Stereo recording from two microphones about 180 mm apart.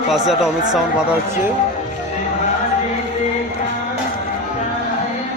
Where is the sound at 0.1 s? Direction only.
Centre (ahead or behind).